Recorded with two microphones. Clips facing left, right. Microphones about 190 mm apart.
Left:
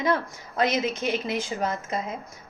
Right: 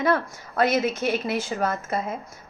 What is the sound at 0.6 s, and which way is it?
Speech, 15° left (ahead or behind).